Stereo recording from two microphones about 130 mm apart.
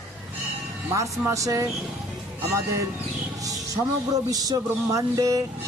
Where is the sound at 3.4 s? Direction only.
25° right (ahead or behind).